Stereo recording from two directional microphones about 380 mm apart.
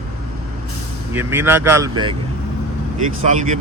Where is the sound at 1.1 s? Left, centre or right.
Centre.